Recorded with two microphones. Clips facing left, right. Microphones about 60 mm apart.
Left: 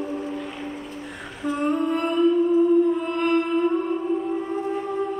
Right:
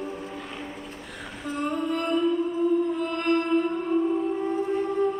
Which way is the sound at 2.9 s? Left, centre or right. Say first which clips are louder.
Left 3 dB; centre.